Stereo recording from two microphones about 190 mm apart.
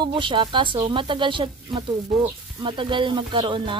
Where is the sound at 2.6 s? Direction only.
25° right (ahead or behind).